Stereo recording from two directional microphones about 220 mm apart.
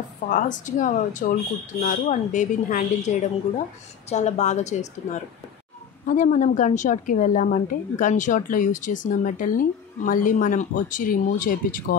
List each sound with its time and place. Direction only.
0.3 s a woman's voice: 35° left (ahead or behind)
6.0 s a woman's voice: 35° left (ahead or behind)